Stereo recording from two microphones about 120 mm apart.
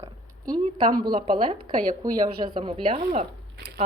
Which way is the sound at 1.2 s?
45° right (ahead or behind).